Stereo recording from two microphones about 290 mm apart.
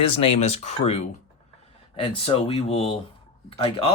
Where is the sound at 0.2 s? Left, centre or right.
Left.